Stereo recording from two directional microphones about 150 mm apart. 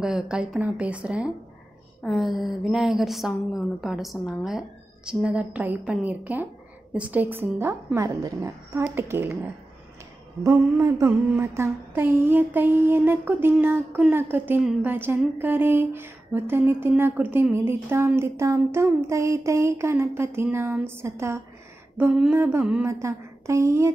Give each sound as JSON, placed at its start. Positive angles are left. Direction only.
{"t": 0.0, "sound": "a woman's voice", "side_deg": -5}
{"t": 10.4, "sound": "speech", "side_deg": -20}
{"t": 14.6, "sound": "a woman's voice", "side_deg": -5}
{"t": 14.9, "sound": "a woman's voice", "side_deg": -15}